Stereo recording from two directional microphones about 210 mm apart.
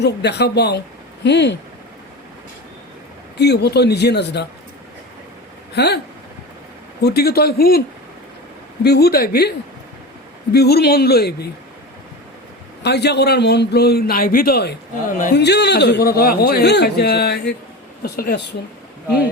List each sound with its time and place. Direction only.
0.0 s speech: 55° left (ahead or behind)
3.3 s speech: 50° left (ahead or behind)
5.7 s speech: 50° left (ahead or behind)
7.0 s speech: 50° left (ahead or behind)
8.8 s speech: 50° left (ahead or behind)
10.5 s speech: 50° left (ahead or behind)
12.8 s speech: 50° left (ahead or behind)